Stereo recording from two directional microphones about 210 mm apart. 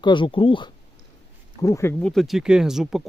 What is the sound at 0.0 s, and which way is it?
Speech, 25° left (ahead or behind).